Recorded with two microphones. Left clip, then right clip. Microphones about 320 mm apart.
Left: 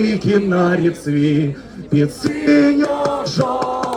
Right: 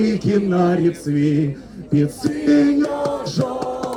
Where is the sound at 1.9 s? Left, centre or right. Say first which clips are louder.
Left 2 dB; centre.